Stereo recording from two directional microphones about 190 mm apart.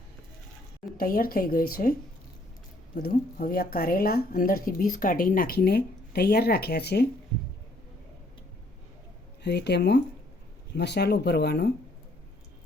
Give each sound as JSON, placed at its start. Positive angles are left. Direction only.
{"t": 0.9, "sound": "speech", "side_deg": 50}
{"t": 9.4, "sound": "speech", "side_deg": 60}